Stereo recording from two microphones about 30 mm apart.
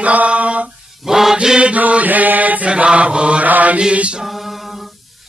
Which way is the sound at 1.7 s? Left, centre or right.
Right.